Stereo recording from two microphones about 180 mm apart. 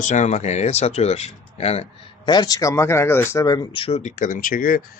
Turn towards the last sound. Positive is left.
turn(degrees=50)  # may be behind; listen again after turning